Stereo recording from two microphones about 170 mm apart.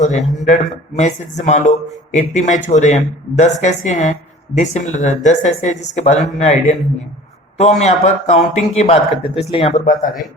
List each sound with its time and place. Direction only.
0.0 s speech: 45° left (ahead or behind)